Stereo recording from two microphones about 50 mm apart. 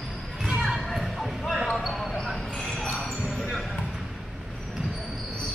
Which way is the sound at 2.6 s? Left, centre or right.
Left.